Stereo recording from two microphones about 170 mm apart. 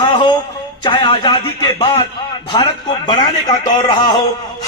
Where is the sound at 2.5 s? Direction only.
25° left (ahead or behind).